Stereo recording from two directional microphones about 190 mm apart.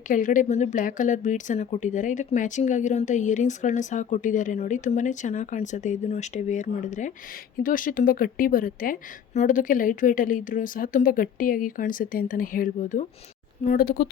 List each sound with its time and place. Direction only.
0.1 s a woman's voice: 40° left (ahead or behind)